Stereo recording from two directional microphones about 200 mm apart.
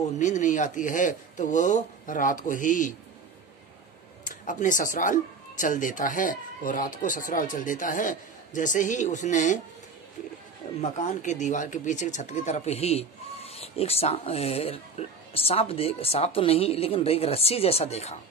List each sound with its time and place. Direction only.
0.2 s speech: 40° left (ahead or behind)
4.2 s speech: 40° left (ahead or behind)
10.8 s speech: 35° left (ahead or behind)